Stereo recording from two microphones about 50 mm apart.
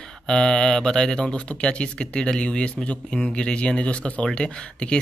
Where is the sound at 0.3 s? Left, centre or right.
Centre.